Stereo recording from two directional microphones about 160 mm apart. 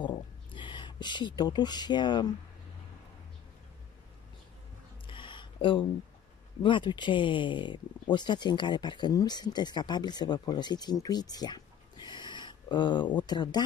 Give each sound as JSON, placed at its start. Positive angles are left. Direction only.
{"t": 0.0, "sound": "speech", "side_deg": 30}
{"t": 5.0, "sound": "a sound", "side_deg": 30}
{"t": 6.6, "sound": "speech", "side_deg": 30}